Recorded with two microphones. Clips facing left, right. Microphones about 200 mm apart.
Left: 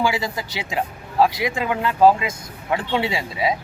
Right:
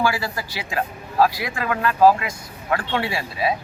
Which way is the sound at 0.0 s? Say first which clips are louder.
Left 1 dB; 20° left (ahead or behind).